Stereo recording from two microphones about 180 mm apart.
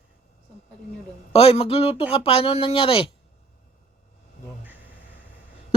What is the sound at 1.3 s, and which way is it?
Speech, 35° left (ahead or behind).